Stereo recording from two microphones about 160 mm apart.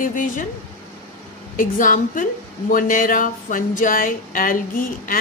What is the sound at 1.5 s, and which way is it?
A woman's voice, 55° left (ahead or behind).